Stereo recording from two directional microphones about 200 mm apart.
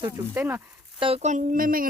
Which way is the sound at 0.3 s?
10° right (ahead or behind).